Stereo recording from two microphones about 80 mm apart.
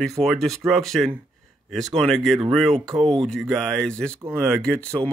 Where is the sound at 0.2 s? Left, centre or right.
Centre.